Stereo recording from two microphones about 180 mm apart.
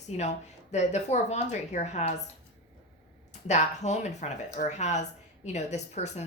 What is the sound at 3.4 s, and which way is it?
A woman's voice, 40° left (ahead or behind).